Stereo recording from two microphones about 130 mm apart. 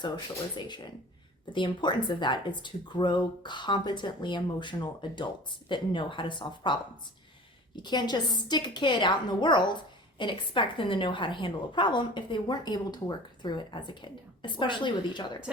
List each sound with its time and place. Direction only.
0.5 s speech: 35° left (ahead or behind)
7.8 s speech: 35° left (ahead or behind)